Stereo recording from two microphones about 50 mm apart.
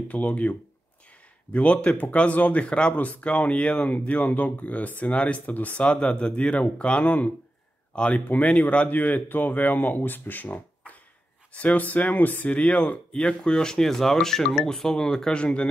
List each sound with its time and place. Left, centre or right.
0.1 s speech: left
8.8 s speech: left